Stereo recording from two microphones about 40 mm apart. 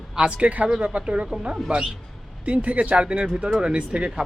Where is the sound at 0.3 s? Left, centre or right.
Right.